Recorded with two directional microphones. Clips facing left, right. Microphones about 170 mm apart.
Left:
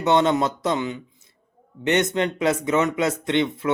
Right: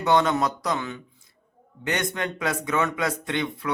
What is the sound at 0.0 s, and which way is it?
Speech, 25° left (ahead or behind).